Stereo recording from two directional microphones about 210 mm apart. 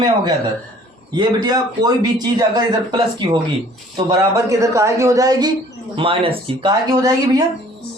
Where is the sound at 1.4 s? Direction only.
20° right (ahead or behind).